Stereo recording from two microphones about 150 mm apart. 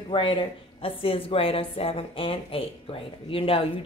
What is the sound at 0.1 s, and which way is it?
A woman's voice, 35° left (ahead or behind).